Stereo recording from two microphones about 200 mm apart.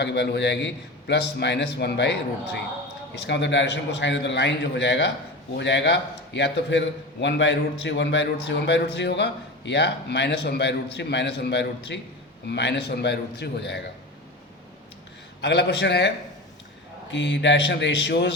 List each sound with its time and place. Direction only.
0.0 s a man's voice: 60° left (ahead or behind)
15.4 s a man's voice: 60° left (ahead or behind)